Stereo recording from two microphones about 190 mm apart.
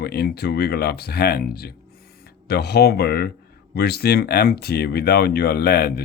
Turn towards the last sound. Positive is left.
turn(degrees=55)  # may be behind; listen again after turning